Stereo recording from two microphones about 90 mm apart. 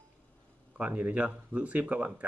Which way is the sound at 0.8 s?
15° right (ahead or behind).